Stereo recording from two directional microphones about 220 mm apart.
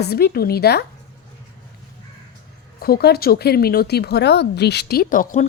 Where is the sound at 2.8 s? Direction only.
45° left (ahead or behind).